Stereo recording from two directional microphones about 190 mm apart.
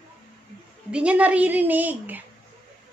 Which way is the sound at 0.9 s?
5° right (ahead or behind).